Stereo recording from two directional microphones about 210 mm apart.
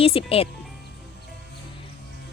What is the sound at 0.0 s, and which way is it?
Speech, 25° left (ahead or behind).